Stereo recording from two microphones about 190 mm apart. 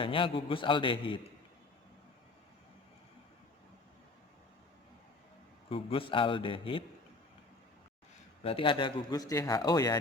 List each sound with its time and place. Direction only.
0.0 s speech: 25° left (ahead or behind)
5.6 s speech: 30° left (ahead or behind)
8.4 s speech: 25° left (ahead or behind)